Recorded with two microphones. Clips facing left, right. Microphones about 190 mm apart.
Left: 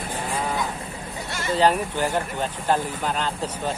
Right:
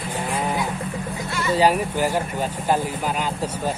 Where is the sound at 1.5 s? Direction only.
10° right (ahead or behind).